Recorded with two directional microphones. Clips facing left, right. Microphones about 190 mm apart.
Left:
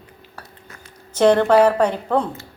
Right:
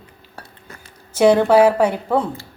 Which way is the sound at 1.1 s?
10° right (ahead or behind).